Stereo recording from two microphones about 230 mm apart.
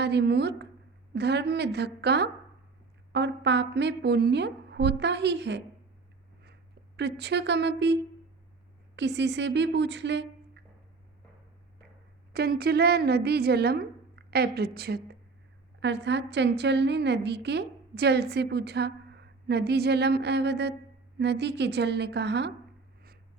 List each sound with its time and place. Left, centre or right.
0.0 s a woman's voice: right
6.4 s a sound: right
7.2 s a woman's voice: right
9.0 s a woman's voice: right
12.3 s a woman's voice: right